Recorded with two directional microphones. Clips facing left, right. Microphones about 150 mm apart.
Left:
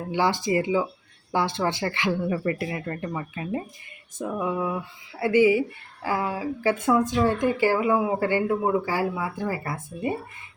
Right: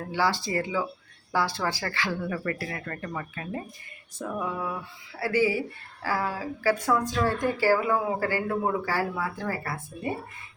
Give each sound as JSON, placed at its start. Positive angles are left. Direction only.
{"t": 0.1, "sound": "a woman's voice", "side_deg": 20}
{"t": 4.2, "sound": "female singing", "side_deg": 15}
{"t": 5.2, "sound": "a woman's voice", "side_deg": 20}